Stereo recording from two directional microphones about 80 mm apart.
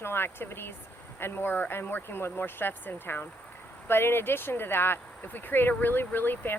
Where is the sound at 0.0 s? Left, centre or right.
Left.